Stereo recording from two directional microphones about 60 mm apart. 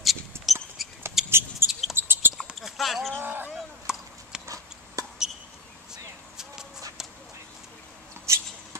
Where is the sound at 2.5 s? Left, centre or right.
Centre.